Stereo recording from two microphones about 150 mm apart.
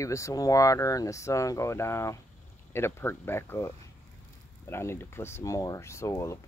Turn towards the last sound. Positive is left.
turn(degrees=20)  # may be behind; listen again after turning